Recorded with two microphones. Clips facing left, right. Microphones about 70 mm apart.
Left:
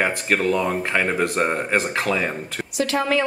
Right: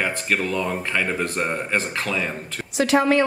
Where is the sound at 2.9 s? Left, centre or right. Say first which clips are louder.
Right 4 dB; centre.